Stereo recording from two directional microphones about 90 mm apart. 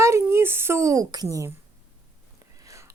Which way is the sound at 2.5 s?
35° right (ahead or behind).